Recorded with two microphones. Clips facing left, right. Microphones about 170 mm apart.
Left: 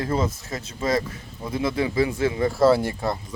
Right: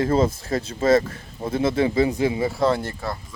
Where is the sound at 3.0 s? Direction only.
20° left (ahead or behind).